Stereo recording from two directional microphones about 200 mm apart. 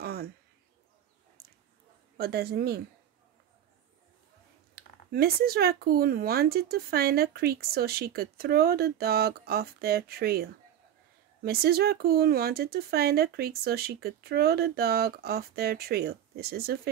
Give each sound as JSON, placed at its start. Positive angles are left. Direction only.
{"t": 0.0, "sound": "a sound", "side_deg": -50}
{"t": 2.1, "sound": "speech", "side_deg": -50}
{"t": 4.7, "sound": "speech", "side_deg": -50}